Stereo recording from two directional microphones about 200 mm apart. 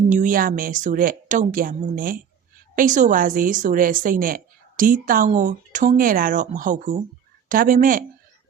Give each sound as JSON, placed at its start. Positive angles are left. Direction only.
{"t": 0.1, "sound": "a woman's voice", "side_deg": -40}